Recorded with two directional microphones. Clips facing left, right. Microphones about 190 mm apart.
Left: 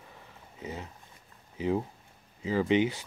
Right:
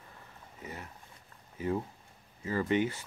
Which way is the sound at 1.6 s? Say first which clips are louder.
Left 4 dB; 20° left (ahead or behind).